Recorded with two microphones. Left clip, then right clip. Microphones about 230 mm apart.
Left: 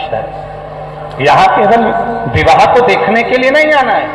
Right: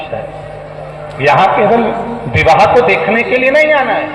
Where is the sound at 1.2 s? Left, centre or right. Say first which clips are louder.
Left 2 dB; left.